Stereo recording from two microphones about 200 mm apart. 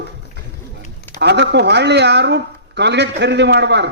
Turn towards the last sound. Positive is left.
turn(degrees=-60)  # may be behind; listen again after turning